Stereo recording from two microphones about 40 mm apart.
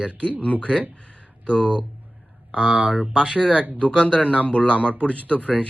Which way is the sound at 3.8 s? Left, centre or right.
Left.